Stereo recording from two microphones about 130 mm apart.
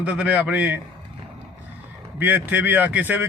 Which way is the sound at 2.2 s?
15° right (ahead or behind).